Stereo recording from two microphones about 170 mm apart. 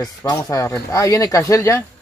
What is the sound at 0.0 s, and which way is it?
Speech, 20° left (ahead or behind).